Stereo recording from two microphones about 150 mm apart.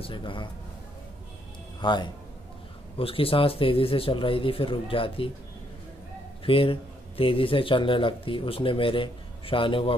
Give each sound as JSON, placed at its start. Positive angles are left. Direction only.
{"t": 0.0, "sound": "speech", "side_deg": 35}
{"t": 1.8, "sound": "a man's voice", "side_deg": 30}
{"t": 6.4, "sound": "speech", "side_deg": 35}